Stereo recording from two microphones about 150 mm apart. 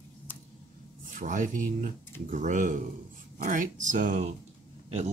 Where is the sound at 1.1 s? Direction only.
60° right (ahead or behind).